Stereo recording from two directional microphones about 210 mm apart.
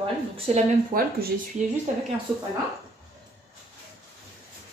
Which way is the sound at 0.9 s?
45° right (ahead or behind).